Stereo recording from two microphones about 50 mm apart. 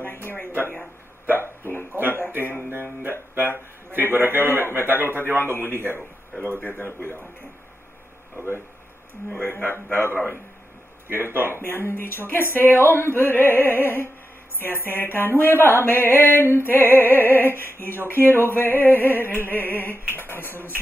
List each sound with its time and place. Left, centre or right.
0.0 s a sound: left
2.0 s a sound: left
3.0 s music: right
3.9 s a man's voice: right
5.4 s music: left
9.4 s music: left
9.9 s music: left
11.1 s a man's voice: right
11.5 s music: left